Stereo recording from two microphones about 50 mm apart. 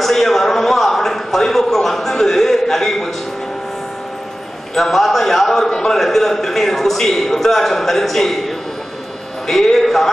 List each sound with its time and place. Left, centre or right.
0.0 s a sound: centre
4.7 s a man's voice: centre
5.7 s a man's voice: centre
5.9 s a man's voice: centre